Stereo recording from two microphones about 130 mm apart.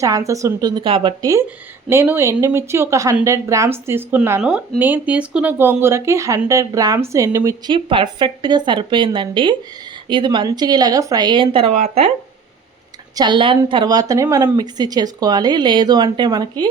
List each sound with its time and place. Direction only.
0.0 s speech: 25° right (ahead or behind); by 1.1 s 40° right (ahead or behind)
1.2 s a woman's voice: 25° right (ahead or behind)
7.9 s speech: 40° right (ahead or behind)
11.7 s speech: 55° right (ahead or behind)
13.1 s speech: 35° right (ahead or behind)